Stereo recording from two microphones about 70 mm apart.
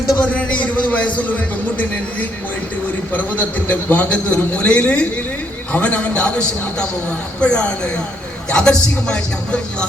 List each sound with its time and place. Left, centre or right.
0.2 s a man's voice: centre
3.1 s a man's voice: left